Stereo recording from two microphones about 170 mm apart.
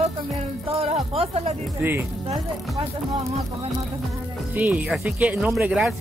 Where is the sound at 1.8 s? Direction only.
10° right (ahead or behind).